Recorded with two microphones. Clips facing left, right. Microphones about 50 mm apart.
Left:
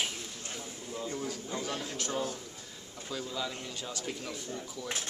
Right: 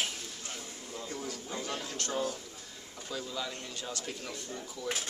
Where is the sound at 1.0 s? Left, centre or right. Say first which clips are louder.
Left 3 dB; centre.